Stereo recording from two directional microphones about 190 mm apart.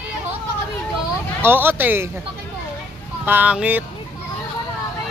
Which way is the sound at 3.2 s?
10° right (ahead or behind).